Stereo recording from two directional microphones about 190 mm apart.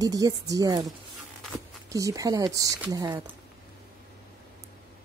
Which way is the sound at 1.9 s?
15° right (ahead or behind).